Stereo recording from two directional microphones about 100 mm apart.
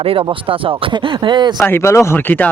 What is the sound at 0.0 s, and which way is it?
Speech, 65° right (ahead or behind).